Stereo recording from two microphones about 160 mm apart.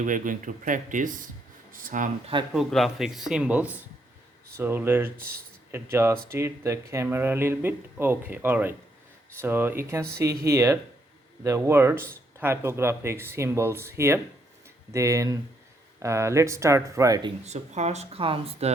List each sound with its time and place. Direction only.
0.0 s speech: 55° right (ahead or behind)
2.5 s speech: centre (ahead or behind); by 17.3 s 20° right (ahead or behind)
17.4 s speech: 45° right (ahead or behind)